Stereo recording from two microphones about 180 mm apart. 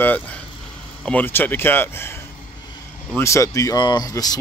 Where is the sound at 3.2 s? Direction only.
15° left (ahead or behind).